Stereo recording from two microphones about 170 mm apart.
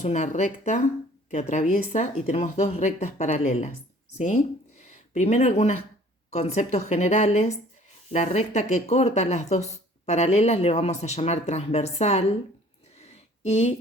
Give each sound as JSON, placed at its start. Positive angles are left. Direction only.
{"t": 0.0, "sound": "speech", "side_deg": 45}
{"t": 4.9, "sound": "speech", "side_deg": 40}
{"t": 13.0, "sound": "a sound", "side_deg": 40}